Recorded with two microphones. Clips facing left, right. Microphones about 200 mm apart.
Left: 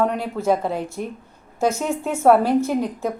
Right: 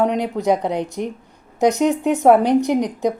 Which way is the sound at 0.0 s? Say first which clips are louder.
Right 3 dB; 15° right (ahead or behind).